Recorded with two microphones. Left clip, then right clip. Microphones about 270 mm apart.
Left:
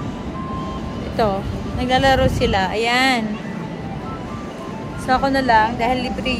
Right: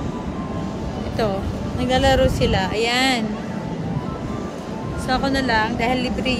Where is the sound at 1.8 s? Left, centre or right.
Left.